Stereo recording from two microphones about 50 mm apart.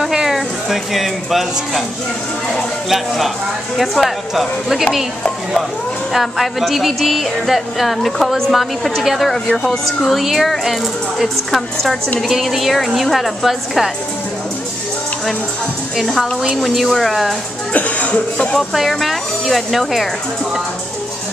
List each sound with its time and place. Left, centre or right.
0.3 s speech: centre
3.7 s speech: centre
6.1 s speech: centre
16.0 s speech: centre
17.7 s speech: left
18.6 s speech: centre